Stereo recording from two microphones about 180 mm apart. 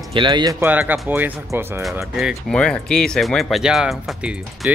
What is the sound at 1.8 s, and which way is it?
Speech, centre (ahead or behind).